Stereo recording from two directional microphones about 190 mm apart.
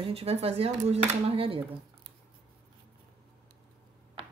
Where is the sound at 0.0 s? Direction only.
30° right (ahead or behind).